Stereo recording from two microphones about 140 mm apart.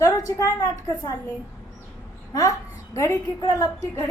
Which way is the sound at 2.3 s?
25° left (ahead or behind).